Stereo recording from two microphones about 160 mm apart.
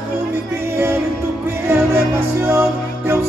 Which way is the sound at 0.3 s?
15° right (ahead or behind).